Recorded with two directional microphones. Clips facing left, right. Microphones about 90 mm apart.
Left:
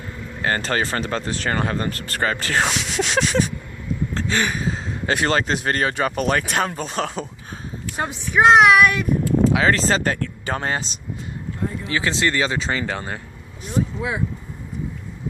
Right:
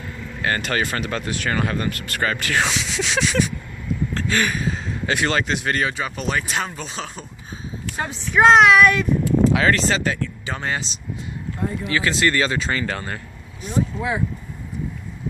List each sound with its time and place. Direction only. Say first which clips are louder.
0.4 s speech: left 1 dB; 30° left (ahead or behind)
2.6 s speech: left 1 dB; 50° left (ahead or behind)
4.1 s speech: even; 20° left (ahead or behind); by 5.9 s 35° left (ahead or behind)
5.9 s speech: left 4 dB; 55° left (ahead or behind)
8.3 s speech: even; 15° left (ahead or behind)
9.7 s speech: left 1 dB; 45° left (ahead or behind)
11.9 s speech: right 1 dB; 25° left (ahead or behind)